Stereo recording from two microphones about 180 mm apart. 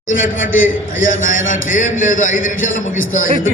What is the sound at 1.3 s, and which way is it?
A man's voice, 45° left (ahead or behind).